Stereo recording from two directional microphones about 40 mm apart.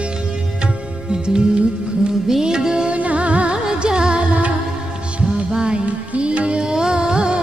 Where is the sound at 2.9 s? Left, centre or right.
Right.